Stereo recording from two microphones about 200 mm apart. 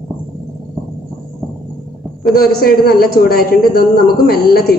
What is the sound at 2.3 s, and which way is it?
A man's voice, 50° left (ahead or behind).